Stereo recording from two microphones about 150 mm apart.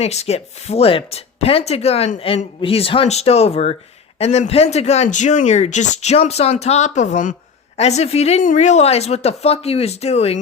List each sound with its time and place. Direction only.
0.0 s speech: 45° left (ahead or behind)